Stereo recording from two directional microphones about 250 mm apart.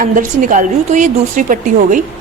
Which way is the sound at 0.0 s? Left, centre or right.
Right.